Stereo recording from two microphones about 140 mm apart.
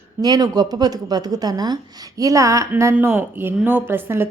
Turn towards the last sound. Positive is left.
turn(degrees=-15)  # may be behind; listen again after turning